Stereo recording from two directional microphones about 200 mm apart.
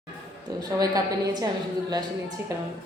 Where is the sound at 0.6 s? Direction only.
20° right (ahead or behind).